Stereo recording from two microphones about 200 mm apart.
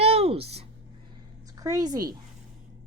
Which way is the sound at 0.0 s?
30° right (ahead or behind).